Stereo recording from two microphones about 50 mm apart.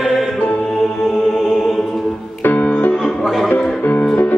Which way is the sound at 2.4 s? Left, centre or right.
Left.